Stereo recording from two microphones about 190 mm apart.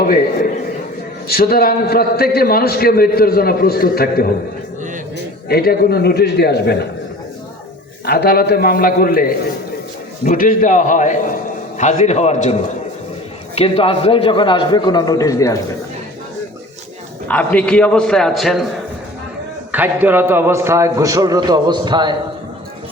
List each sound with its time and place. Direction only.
1.3 s a man's voice: 55° left (ahead or behind)
8.0 s a man's voice: 55° left (ahead or behind)
10.2 s a man's voice: 45° left (ahead or behind)
13.6 s a man's voice: 30° left (ahead or behind)
17.2 s a man's voice: 5° left (ahead or behind)
19.7 s a man's voice: 10° right (ahead or behind)